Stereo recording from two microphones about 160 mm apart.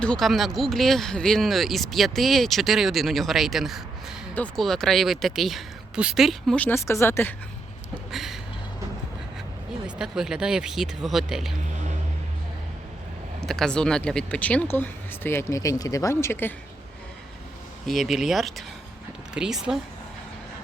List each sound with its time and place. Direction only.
0.0 s speech: 5° left (ahead or behind)
6.6 s speech: 15° left (ahead or behind)
8.1 s a sound: centre (ahead or behind)
9.8 s speech: 5° right (ahead or behind)
11.7 s a sound: 50° right (ahead or behind)
13.4 s speech: 5° left (ahead or behind)
17.8 s speech: centre (ahead or behind)